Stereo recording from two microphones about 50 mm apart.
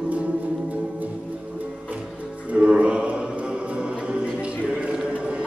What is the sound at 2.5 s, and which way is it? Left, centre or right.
Music, right.